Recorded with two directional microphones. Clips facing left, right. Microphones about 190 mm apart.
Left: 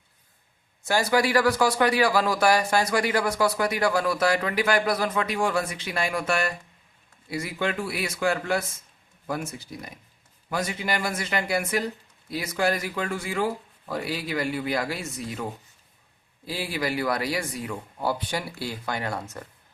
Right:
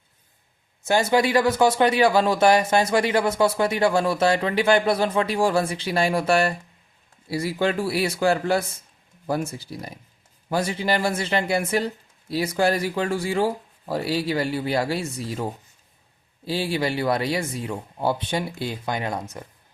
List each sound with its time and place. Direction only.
0.9 s speech: 25° right (ahead or behind)
16.5 s speech: 30° right (ahead or behind)